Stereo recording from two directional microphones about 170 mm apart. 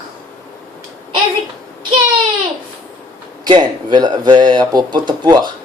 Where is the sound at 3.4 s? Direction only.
25° right (ahead or behind).